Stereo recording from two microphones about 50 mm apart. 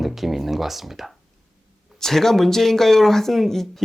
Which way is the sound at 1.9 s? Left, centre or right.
Centre.